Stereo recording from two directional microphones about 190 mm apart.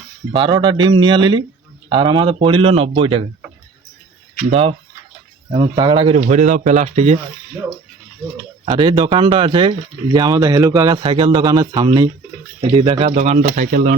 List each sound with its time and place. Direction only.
0.3 s speech: 25° right (ahead or behind)
5.5 s speech: 25° right (ahead or behind)
6.2 s speech: 40° right (ahead or behind)
8.6 s speech: 25° right (ahead or behind); by 13.9 s 45° right (ahead or behind)